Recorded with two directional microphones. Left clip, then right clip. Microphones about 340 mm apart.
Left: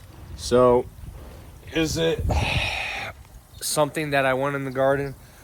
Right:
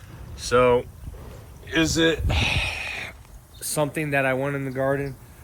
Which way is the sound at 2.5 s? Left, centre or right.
Left.